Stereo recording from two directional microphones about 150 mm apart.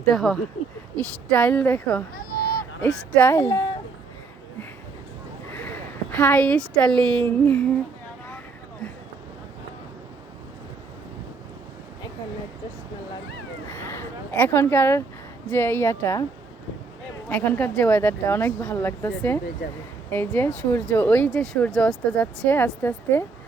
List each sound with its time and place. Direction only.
0.1 s speech: centre (ahead or behind)
2.1 s a sound: 85° left
2.8 s speech: 10° left (ahead or behind)
5.5 s a woman's voice: 10° left (ahead or behind)
13.7 s a sound: 15° left (ahead or behind)
15.4 s speech: 15° left (ahead or behind)
17.2 s speech: 10° left (ahead or behind)